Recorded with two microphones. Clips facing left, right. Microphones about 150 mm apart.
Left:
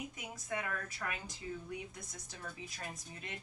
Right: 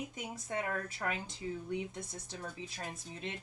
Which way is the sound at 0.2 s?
30° right (ahead or behind).